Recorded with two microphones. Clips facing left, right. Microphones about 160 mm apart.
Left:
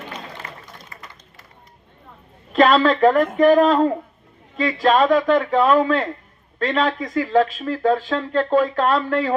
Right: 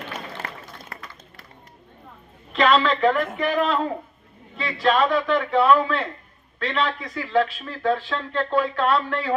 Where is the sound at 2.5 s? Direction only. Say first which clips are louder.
Left 4 dB; 45° left (ahead or behind).